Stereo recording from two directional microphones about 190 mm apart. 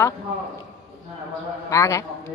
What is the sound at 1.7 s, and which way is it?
Speech, 15° left (ahead or behind).